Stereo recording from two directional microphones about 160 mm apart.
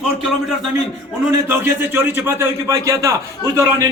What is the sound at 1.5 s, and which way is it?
A man's voice, 15° right (ahead or behind).